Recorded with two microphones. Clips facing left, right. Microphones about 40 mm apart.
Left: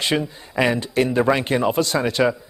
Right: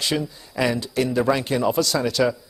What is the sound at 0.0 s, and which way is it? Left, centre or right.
A man's voice, left.